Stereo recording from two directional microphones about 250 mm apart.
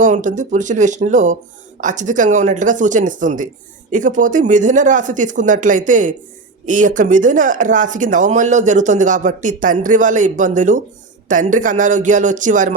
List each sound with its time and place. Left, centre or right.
0.0 s speech: right